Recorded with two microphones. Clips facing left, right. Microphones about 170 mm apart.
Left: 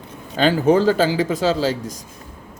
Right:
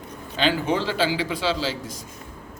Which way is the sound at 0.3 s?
45° left (ahead or behind).